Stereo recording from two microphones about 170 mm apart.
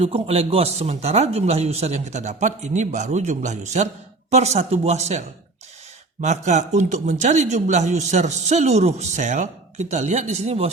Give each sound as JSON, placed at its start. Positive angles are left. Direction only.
{"t": 0.0, "sound": "speech", "side_deg": -35}
{"t": 6.2, "sound": "speech", "side_deg": -45}